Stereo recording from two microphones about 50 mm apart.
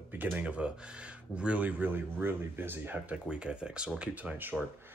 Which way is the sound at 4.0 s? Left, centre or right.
Right.